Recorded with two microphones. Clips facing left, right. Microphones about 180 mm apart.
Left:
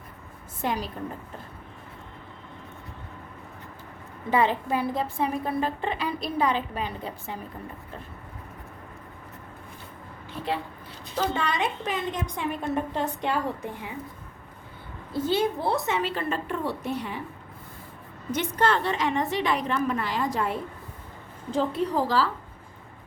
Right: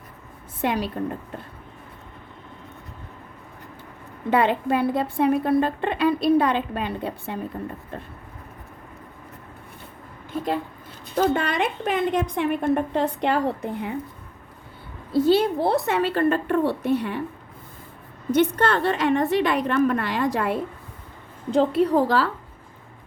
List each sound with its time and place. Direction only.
0.6 s a woman's voice: 65° right (ahead or behind)
4.3 s a woman's voice: 65° right (ahead or behind)
11.1 s a woman's voice: 55° right (ahead or behind)
15.1 s a woman's voice: 60° right (ahead or behind)
18.3 s a woman's voice: 60° right (ahead or behind)
21.7 s a woman's voice: 65° right (ahead or behind)